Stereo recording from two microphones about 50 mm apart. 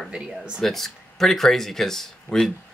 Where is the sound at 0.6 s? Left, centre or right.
Centre.